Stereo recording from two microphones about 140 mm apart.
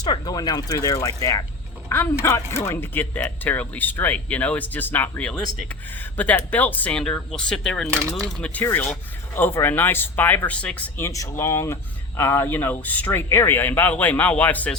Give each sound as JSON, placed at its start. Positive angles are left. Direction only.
{"t": 0.0, "sound": "speech", "side_deg": 30}